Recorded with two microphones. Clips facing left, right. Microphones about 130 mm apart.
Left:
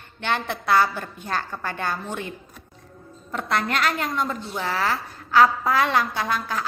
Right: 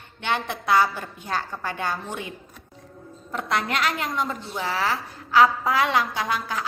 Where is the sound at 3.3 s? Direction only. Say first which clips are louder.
Left 1 dB; 15° right (ahead or behind).